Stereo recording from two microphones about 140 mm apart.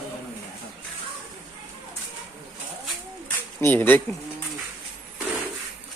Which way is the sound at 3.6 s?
15° left (ahead or behind).